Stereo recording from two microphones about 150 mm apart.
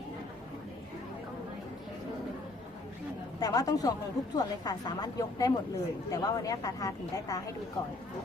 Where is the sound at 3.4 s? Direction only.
25° left (ahead or behind).